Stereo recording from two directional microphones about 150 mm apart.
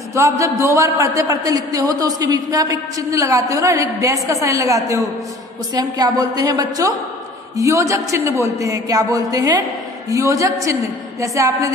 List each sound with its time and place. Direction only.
0.1 s a man's voice: 20° right (ahead or behind)